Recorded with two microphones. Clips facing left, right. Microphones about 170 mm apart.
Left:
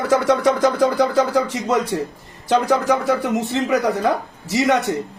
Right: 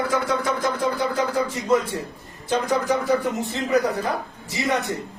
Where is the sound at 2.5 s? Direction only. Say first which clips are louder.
Left 5 dB; 85° left.